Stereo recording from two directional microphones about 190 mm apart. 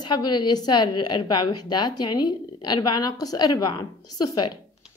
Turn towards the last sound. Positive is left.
turn(degrees=20)  # may be behind; listen again after turning